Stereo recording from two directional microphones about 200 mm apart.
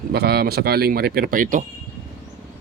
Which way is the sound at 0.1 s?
50° right (ahead or behind).